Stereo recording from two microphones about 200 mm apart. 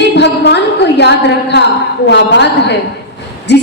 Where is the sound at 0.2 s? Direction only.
55° left (ahead or behind).